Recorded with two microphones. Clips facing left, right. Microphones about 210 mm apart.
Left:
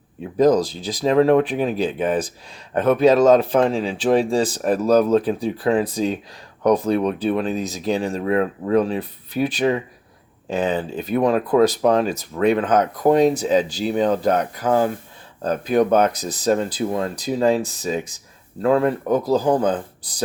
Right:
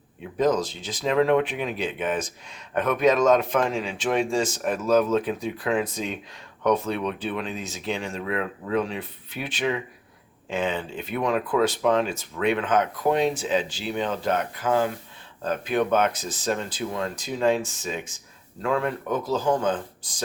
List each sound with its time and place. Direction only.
0.3 s speech: 35° left (ahead or behind)